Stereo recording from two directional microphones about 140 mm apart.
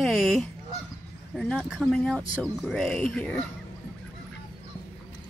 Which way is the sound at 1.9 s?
5° left (ahead or behind).